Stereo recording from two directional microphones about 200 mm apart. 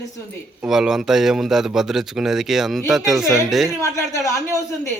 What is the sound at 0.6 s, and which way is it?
Speech, centre (ahead or behind).